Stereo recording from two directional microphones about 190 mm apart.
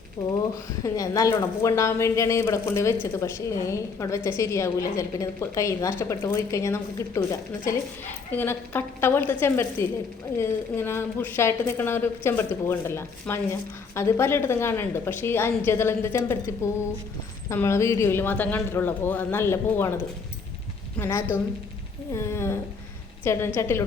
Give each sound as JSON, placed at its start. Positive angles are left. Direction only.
{"t": 0.2, "sound": "a woman's voice", "side_deg": 20}
{"t": 17.5, "sound": "a woman's voice", "side_deg": 15}
{"t": 21.0, "sound": "a woman's voice", "side_deg": 15}